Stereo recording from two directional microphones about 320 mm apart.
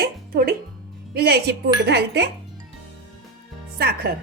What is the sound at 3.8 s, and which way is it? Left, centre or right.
Speech, right.